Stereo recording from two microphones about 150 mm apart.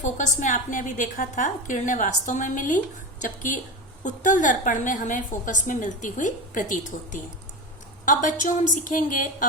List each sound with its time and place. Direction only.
0.0 s a woman's voice: 55° left (ahead or behind)